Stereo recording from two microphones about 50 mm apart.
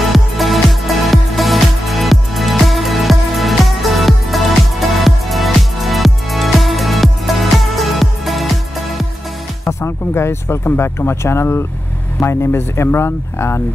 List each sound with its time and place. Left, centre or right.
0.0 s music: centre
9.7 s speech: left